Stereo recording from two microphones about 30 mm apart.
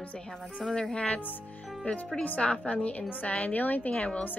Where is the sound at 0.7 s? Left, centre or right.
Left.